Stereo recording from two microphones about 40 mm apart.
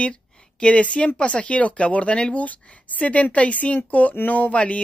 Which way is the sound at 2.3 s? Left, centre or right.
Left.